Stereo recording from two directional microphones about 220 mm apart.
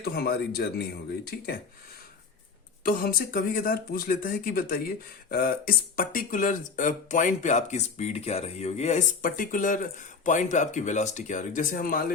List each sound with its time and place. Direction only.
0.0 s speech: 45° left (ahead or behind)
2.8 s speech: 40° left (ahead or behind)